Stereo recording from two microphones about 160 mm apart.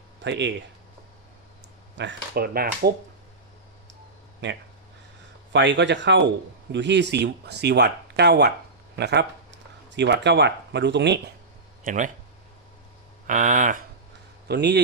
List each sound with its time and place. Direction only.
0.2 s speech: 90° right
2.0 s speech: 90° right
2.3 s speech: 75° right (ahead or behind)
5.5 s speech: 90° right
11.9 s speech: 55° right (ahead or behind)
13.2 s speech: 55° right (ahead or behind)
14.4 s a man's voice: 90° right